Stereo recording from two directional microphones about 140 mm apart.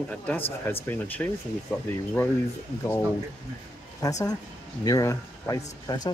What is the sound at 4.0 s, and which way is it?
A woman's voice, 25° left (ahead or behind).